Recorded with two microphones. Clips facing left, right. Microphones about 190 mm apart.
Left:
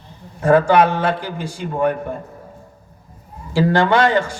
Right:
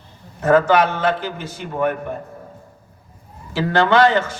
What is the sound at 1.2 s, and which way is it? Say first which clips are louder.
Speech: left 1 dB; 15° left (ahead or behind).